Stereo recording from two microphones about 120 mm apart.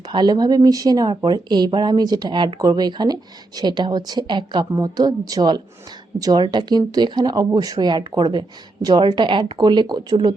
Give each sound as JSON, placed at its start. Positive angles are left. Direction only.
{"t": 0.1, "sound": "speech", "side_deg": -35}